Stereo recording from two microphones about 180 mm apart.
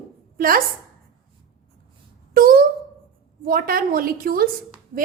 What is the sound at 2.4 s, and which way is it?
A woman's voice, 55° right (ahead or behind).